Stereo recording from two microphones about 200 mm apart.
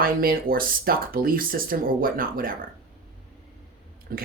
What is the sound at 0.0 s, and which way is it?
Speech, 45° right (ahead or behind).